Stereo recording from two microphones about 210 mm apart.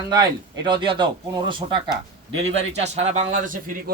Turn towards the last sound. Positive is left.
turn(degrees=-40)  # may be behind; listen again after turning